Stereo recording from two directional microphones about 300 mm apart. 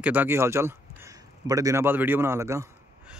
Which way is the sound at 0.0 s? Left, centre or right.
Centre.